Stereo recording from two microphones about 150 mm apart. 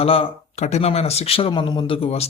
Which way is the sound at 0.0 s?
40° left (ahead or behind).